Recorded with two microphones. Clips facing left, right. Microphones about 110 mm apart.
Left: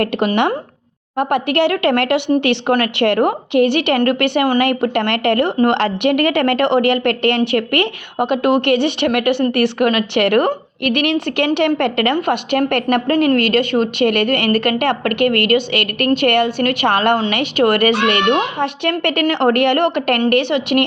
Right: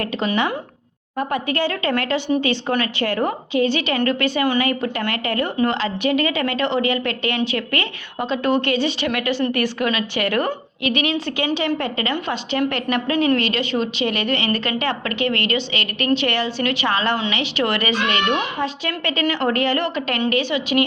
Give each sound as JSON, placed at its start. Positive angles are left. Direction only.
{"t": 0.0, "sound": "a woman's voice", "side_deg": 60}
{"t": 1.1, "sound": "a woman's voice", "side_deg": 70}